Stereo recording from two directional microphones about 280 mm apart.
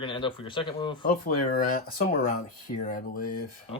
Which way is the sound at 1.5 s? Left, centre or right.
Left.